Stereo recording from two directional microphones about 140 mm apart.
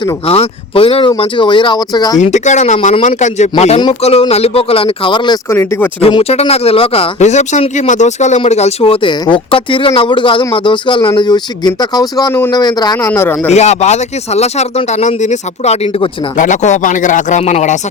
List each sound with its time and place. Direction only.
0.3 s speech: 40° left (ahead or behind)
2.1 s speech: 55° left (ahead or behind)
4.0 s speech: 45° left (ahead or behind)
5.5 s speech: 15° left (ahead or behind)
6.0 s speech: 40° left (ahead or behind)
13.1 s speech: 15° left (ahead or behind)
13.5 s speech: 55° left (ahead or behind)
16.4 s speech: 60° left (ahead or behind)